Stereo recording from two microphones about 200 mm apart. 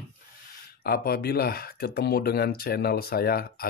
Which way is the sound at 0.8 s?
50° left (ahead or behind).